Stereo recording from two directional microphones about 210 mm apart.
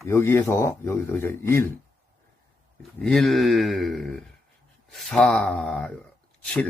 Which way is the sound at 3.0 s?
5° left (ahead or behind).